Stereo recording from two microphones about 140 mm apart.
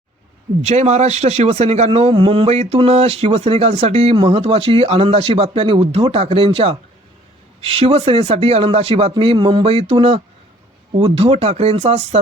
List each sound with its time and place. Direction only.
0.6 s a man's voice: 55° right (ahead or behind)